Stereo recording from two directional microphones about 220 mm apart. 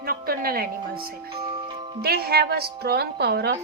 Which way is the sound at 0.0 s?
45° right (ahead or behind).